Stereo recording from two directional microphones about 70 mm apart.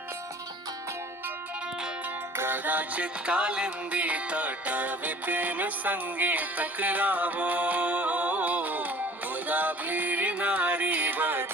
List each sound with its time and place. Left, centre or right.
2.3 s music: right
2.6 s music: right